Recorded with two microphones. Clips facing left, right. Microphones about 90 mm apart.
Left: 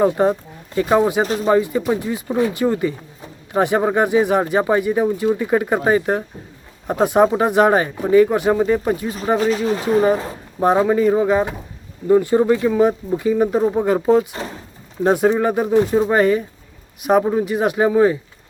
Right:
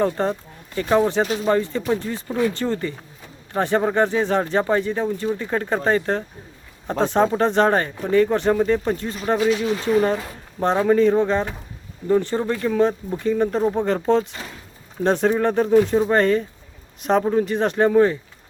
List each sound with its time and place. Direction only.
0.0 s speech: 15° left (ahead or behind)
1.2 s speech: 40° left (ahead or behind)
1.5 s speech: 10° left (ahead or behind)
9.4 s speech: 40° left (ahead or behind)
10.6 s speech: 10° left (ahead or behind)